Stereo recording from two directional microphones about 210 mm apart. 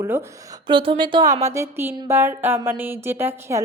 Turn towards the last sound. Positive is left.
turn(degrees=-10)  # may be behind; listen again after turning